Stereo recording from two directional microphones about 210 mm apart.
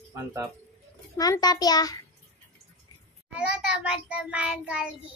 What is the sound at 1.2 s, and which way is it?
Speech, 20° left (ahead or behind).